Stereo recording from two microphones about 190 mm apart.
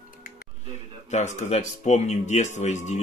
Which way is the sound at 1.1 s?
40° left (ahead or behind).